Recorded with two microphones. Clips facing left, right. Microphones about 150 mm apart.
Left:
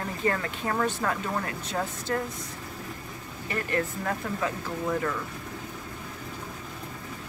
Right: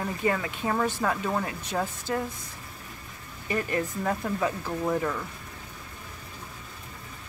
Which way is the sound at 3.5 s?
20° right (ahead or behind).